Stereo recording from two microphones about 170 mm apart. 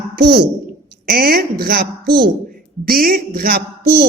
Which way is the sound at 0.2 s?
75° right (ahead or behind).